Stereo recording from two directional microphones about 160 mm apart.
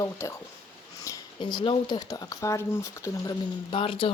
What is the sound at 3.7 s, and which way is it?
Speech, 35° left (ahead or behind).